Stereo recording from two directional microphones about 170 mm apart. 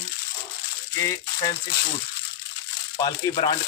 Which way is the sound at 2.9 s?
25° left (ahead or behind).